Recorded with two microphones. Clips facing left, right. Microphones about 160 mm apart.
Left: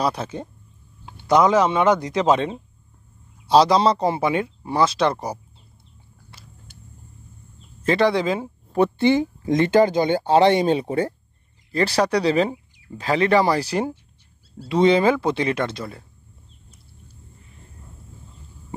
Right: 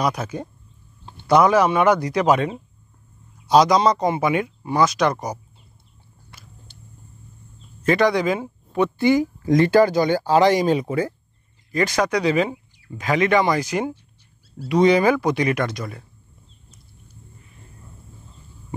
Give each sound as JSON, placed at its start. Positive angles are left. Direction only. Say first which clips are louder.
{"t": 0.0, "sound": "speech", "louder": "even", "side_deg": 30}
{"t": 6.3, "sound": "vehicle", "louder": "right 1 dB", "side_deg": 25}
{"t": 7.8, "sound": "speech", "louder": "right 1 dB", "side_deg": 25}